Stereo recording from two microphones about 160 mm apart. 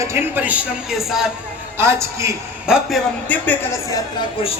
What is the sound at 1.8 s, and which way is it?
Speech, 15° right (ahead or behind).